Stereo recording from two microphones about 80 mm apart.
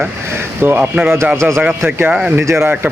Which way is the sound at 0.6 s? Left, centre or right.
Right.